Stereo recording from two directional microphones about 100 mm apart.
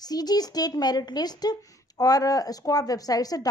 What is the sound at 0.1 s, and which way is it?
A child's voice, 40° left (ahead or behind).